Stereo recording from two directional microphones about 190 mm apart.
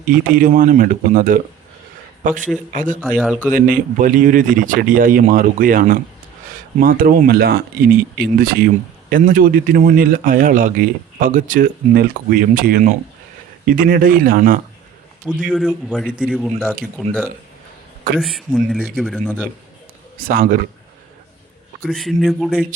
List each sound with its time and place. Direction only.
0.1 s speech: 45° right (ahead or behind)
3.1 s a man's voice: 5° right (ahead or behind)
3.7 s speech: 45° right (ahead or behind)
15.4 s a man's voice: 5° left (ahead or behind)
18.2 s a man's voice: centre (ahead or behind)
20.1 s speech: 50° right (ahead or behind)
21.8 s a man's voice: centre (ahead or behind)